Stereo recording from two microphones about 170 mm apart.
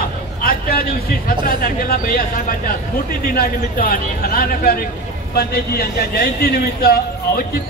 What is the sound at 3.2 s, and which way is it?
A man's voice, 55° left (ahead or behind).